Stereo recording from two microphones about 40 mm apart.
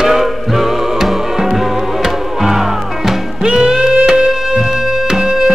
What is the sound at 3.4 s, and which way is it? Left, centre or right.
Music, centre.